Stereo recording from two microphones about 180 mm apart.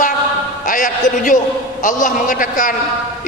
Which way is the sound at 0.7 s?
50° left (ahead or behind).